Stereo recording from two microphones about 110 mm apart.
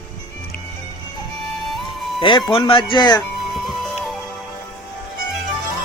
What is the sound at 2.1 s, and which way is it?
Speech, 50° left (ahead or behind).